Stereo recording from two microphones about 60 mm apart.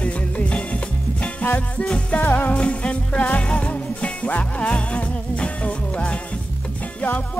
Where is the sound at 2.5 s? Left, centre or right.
Centre.